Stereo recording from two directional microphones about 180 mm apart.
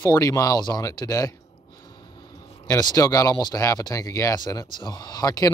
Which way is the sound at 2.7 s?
20° left (ahead or behind).